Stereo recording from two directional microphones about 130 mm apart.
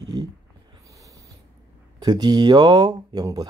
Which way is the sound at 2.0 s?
30° right (ahead or behind).